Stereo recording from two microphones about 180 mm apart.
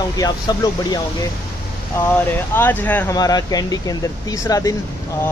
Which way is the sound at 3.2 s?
20° left (ahead or behind).